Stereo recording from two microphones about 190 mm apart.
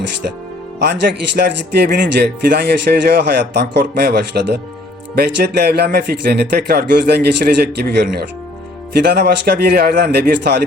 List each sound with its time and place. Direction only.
0.8 s speech: 55° right (ahead or behind)